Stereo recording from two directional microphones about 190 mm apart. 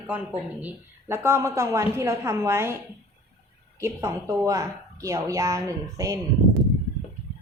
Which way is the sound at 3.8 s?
15° right (ahead or behind).